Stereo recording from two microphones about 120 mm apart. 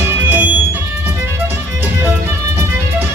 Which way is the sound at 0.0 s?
20° right (ahead or behind).